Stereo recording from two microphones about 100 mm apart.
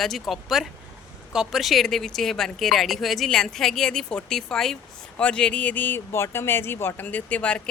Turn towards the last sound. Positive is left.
turn(degrees=15)  # may be behind; listen again after turning